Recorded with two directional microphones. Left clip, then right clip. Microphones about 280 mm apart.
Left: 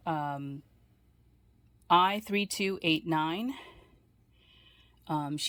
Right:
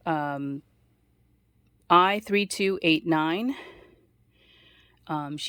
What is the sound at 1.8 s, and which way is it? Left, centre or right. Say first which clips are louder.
Speech: right 5 dB; centre.